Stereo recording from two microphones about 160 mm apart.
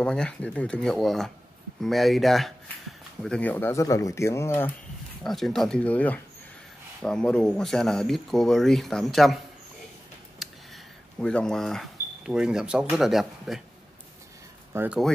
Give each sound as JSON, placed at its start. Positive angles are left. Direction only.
{"t": 0.0, "sound": "speech", "side_deg": 5}
{"t": 5.2, "sound": "speech", "side_deg": 0}
{"t": 10.4, "sound": "a sound", "side_deg": 0}
{"t": 11.1, "sound": "speech", "side_deg": 5}
{"t": 14.7, "sound": "speech", "side_deg": -15}